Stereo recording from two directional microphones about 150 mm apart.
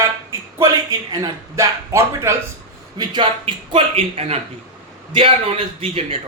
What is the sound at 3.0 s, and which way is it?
Speech, 30° right (ahead or behind).